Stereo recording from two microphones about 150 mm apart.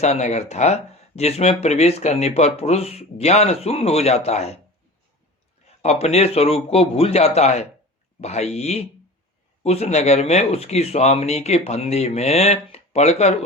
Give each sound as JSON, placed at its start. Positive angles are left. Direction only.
{"t": 0.0, "sound": "speech", "side_deg": 50}
{"t": 5.8, "sound": "speech", "side_deg": 45}